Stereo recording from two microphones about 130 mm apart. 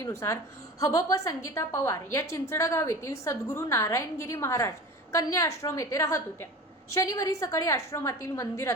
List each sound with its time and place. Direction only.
0.0 s a woman's voice: 20° left (ahead or behind)